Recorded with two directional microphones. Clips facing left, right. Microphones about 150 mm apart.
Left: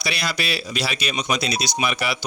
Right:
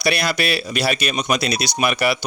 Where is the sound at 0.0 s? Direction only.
60° right (ahead or behind).